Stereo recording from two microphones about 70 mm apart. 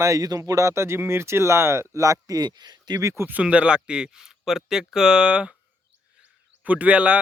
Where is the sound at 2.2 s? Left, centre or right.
Right.